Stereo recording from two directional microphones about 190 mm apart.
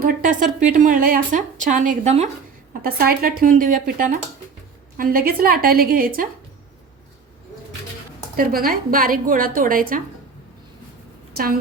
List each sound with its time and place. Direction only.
0.0 s a woman's voice: 45° right (ahead or behind)
2.8 s a woman's voice: 50° right (ahead or behind)
8.4 s a woman's voice: 50° right (ahead or behind)